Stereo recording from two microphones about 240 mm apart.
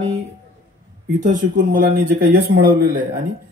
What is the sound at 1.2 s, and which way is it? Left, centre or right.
A man's voice, right.